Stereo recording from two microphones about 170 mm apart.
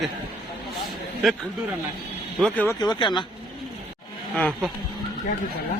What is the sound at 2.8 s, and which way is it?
Speech, 25° left (ahead or behind).